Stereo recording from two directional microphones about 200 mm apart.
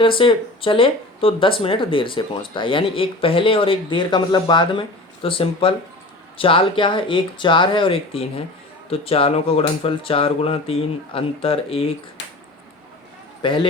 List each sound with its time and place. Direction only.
0.0 s speech: 25° left (ahead or behind)
13.4 s a man's voice: 25° left (ahead or behind)